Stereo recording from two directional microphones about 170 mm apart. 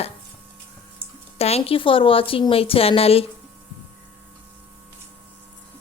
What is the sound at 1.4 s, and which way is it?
A woman's voice, 35° left (ahead or behind).